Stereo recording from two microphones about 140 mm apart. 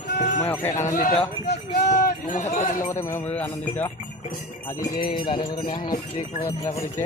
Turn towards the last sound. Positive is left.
turn(degrees=35)  # may be behind; listen again after turning